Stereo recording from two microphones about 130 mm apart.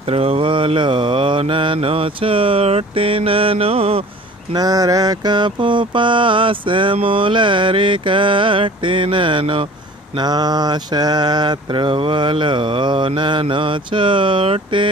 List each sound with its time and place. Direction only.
0.1 s mantra: 50° right (ahead or behind)
4.6 s mantra: 30° right (ahead or behind)
10.1 s mantra: 30° right (ahead or behind)